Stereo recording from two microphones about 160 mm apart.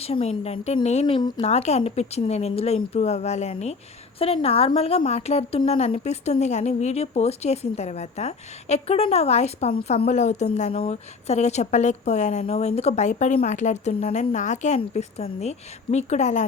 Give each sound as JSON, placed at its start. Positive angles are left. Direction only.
{"t": 0.0, "sound": "a woman's voice", "side_deg": 40}